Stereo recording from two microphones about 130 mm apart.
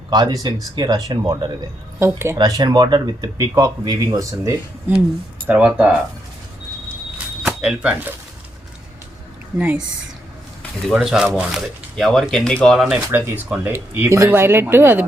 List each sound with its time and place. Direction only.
0.1 s speech: 30° right (ahead or behind)
2.0 s speech: 20° right (ahead or behind)
2.4 s speech: 30° right (ahead or behind)
5.5 s speech: 10° right (ahead or behind)
7.4 s speech: 5° right (ahead or behind)
9.6 s speech: 10° right (ahead or behind)
10.9 s speech: 5° right (ahead or behind)
12.9 s speech: 15° right (ahead or behind)